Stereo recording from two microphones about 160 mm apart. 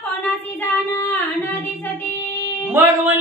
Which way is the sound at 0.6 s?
15° left (ahead or behind).